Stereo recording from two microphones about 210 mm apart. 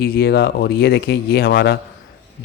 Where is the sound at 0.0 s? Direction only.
45° left (ahead or behind).